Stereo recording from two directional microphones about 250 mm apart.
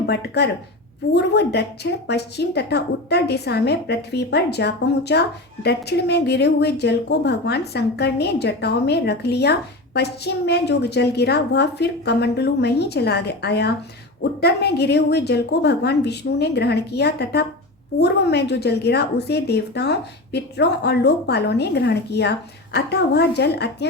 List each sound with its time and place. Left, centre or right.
0.0 s a woman's voice: left